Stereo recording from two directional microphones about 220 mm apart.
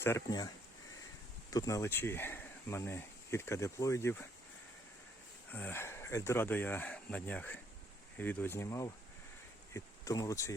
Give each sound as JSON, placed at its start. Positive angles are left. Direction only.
{"t": 0.0, "sound": "speech", "side_deg": 15}
{"t": 5.5, "sound": "speech", "side_deg": 10}